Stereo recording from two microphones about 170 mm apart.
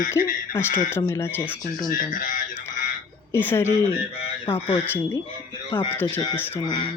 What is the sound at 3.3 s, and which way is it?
Speech, 15° left (ahead or behind).